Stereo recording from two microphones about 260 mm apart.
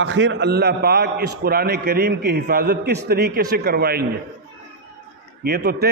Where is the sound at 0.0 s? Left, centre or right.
Right.